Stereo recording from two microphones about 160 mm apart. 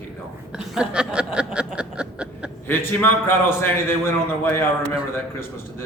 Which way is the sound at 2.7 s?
15° left (ahead or behind).